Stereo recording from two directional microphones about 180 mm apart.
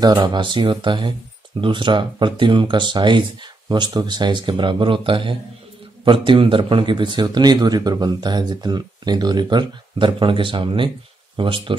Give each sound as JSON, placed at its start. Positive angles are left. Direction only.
{"t": 0.0, "sound": "a man's voice", "side_deg": -25}